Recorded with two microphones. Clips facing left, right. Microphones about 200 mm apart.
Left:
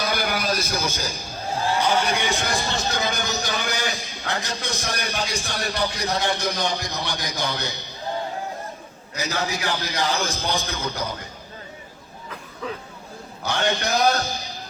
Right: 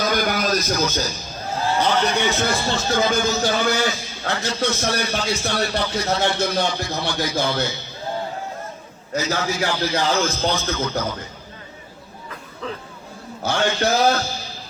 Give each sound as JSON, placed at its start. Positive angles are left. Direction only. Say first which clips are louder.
{"t": 0.1, "sound": "a man's voice", "louder": "right 4 dB", "side_deg": 10}
{"t": 9.1, "sound": "a man's voice", "louder": "right 4 dB", "side_deg": 15}
{"t": 13.6, "sound": "a man's voice", "louder": "right 3 dB", "side_deg": 15}